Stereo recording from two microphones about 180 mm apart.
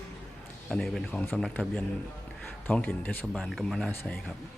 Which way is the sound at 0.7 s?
5° left (ahead or behind).